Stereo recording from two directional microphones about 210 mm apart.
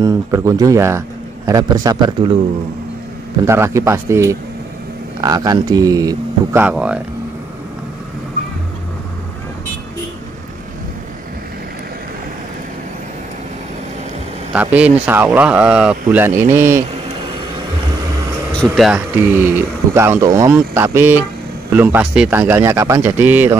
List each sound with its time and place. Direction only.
0.0 s a man's voice: 15° right (ahead or behind)
3.4 s a man's voice: 10° right (ahead or behind)
14.5 s a man's voice: 5° right (ahead or behind)
18.6 s a man's voice: centre (ahead or behind)